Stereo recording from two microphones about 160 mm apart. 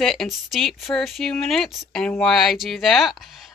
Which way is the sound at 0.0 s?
Centre (ahead or behind).